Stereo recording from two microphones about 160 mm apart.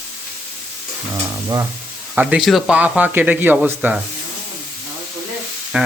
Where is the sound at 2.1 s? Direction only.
5° right (ahead or behind).